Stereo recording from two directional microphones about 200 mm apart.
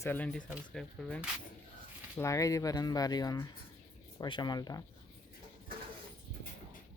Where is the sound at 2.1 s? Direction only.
15° left (ahead or behind).